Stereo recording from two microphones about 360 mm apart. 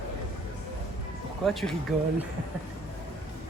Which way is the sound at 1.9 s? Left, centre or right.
Centre.